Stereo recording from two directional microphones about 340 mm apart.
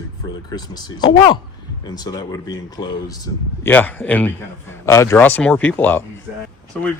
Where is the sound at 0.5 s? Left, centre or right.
Centre.